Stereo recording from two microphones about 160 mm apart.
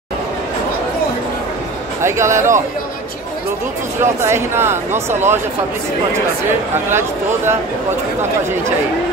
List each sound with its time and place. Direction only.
2.0 s speech: 15° right (ahead or behind)
4.0 s speech: 15° right (ahead or behind)
6.9 s speech: 15° right (ahead or behind)